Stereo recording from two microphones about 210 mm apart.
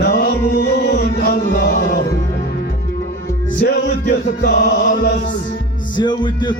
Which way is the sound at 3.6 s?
50° left (ahead or behind).